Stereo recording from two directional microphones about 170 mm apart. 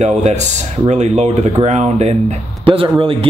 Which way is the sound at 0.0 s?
45° right (ahead or behind).